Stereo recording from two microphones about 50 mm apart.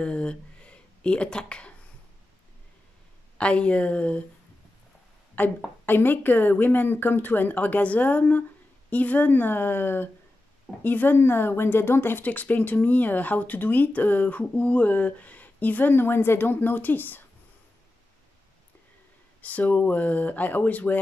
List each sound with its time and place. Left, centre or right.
0.0 s speech: left
3.3 s speech: left
5.4 s speech: left
12.3 s speech: left
19.4 s speech: left